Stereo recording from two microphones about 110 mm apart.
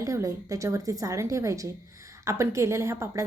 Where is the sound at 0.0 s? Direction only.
30° right (ahead or behind).